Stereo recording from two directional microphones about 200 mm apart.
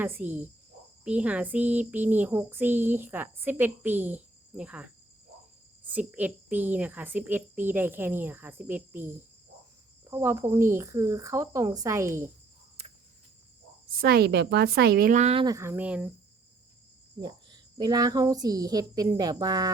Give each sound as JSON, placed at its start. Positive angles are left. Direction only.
{"t": 0.0, "sound": "a child's voice", "side_deg": -10}
{"t": 13.9, "sound": "speech", "side_deg": -50}
{"t": 15.4, "sound": "a child's voice", "side_deg": -15}
{"t": 17.2, "sound": "a woman's voice", "side_deg": -20}